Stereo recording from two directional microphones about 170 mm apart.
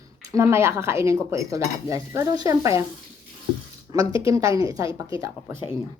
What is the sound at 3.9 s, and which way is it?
Speech, 20° right (ahead or behind).